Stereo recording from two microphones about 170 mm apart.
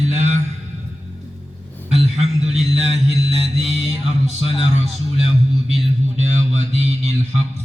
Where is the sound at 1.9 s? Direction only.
40° right (ahead or behind).